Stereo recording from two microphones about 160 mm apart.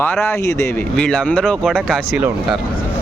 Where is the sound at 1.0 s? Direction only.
5° left (ahead or behind).